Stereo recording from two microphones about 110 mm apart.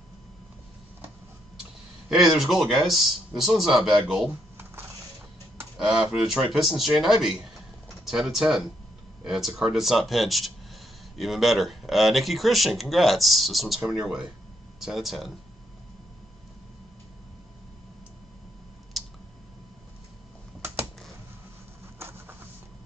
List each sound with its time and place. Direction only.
2.0 s speech: 5° right (ahead or behind)
4.3 s typing: 20° right (ahead or behind)
5.8 s speech: 5° right (ahead or behind)
18.9 s a sound: centre (ahead or behind)